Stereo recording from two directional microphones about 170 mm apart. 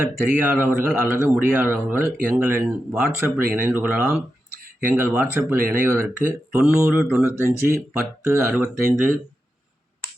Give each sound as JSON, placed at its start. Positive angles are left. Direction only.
{"t": 0.1, "sound": "a man's voice", "side_deg": -10}